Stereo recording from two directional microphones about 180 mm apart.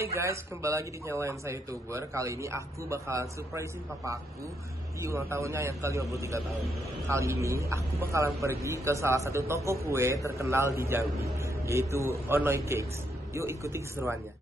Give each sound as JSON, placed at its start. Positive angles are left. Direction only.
{"t": 0.0, "sound": "a man's voice", "side_deg": -15}